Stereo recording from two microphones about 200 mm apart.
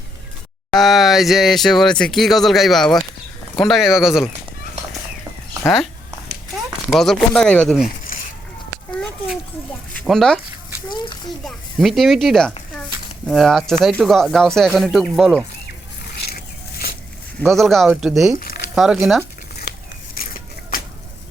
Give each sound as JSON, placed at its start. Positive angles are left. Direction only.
{"t": 0.7, "sound": "speech", "side_deg": 0}
{"t": 5.6, "sound": "speech", "side_deg": 0}
{"t": 6.9, "sound": "speech", "side_deg": 0}
{"t": 8.9, "sound": "a sound", "side_deg": 0}
{"t": 9.9, "sound": "speech", "side_deg": 5}
{"t": 11.4, "sound": "speech", "side_deg": 0}
{"t": 17.5, "sound": "speech", "side_deg": 0}
{"t": 19.7, "sound": "a sound", "side_deg": 55}